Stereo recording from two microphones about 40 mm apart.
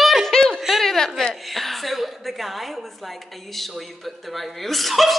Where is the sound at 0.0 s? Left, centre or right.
Centre.